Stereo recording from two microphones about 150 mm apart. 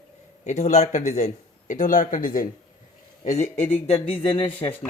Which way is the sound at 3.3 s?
50° left (ahead or behind).